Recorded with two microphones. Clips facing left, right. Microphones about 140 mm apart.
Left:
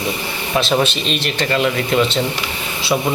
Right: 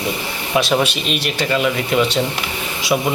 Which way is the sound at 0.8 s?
10° right (ahead or behind).